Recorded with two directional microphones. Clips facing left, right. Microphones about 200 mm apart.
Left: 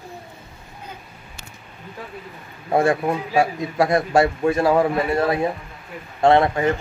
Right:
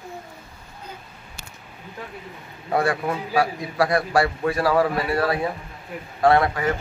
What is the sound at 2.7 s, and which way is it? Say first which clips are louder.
A man's voice: left 4 dB; 25° left (ahead or behind).